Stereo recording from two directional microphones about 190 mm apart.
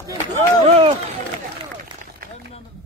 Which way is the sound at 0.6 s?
35° right (ahead or behind).